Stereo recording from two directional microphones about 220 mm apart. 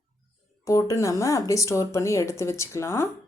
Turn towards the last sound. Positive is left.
turn(degrees=10)  # may be behind; listen again after turning